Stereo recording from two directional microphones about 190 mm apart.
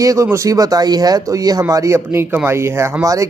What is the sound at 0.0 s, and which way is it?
A man's voice, 15° right (ahead or behind).